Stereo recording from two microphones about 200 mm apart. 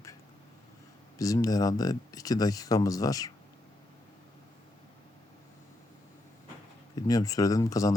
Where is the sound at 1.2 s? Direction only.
15° left (ahead or behind).